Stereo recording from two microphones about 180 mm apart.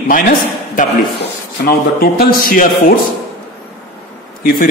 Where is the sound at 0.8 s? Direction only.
45° left (ahead or behind).